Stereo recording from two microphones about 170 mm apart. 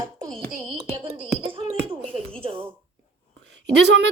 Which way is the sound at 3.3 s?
90° right.